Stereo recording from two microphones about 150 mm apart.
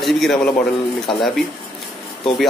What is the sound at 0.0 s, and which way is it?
A man's voice, centre (ahead or behind).